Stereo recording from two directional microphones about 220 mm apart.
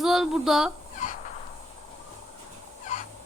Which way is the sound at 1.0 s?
35° left (ahead or behind).